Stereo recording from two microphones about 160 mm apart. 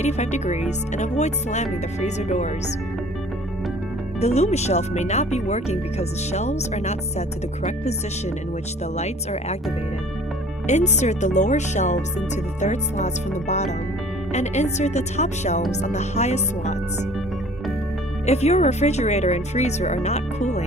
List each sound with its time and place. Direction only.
0.0 s speech: 45° left (ahead or behind)
4.2 s speech: 40° left (ahead or behind)
9.0 s speech: 45° left (ahead or behind)
10.7 s speech: 45° left (ahead or behind)
18.3 s speech: 40° left (ahead or behind)